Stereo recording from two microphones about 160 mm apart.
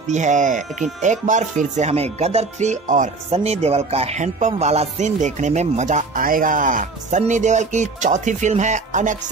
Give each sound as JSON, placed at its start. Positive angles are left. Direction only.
{"t": 0.1, "sound": "speech", "side_deg": -50}
{"t": 3.3, "sound": "speech", "side_deg": -40}